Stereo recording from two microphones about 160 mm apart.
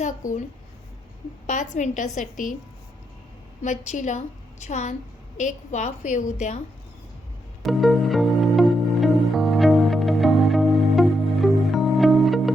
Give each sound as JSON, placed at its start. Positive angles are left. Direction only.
{"t": 0.0, "sound": "a woman's voice", "side_deg": 50}
{"t": 1.5, "sound": "a woman's voice", "side_deg": 50}
{"t": 3.6, "sound": "a woman's voice", "side_deg": 50}
{"t": 7.6, "sound": "music", "side_deg": 0}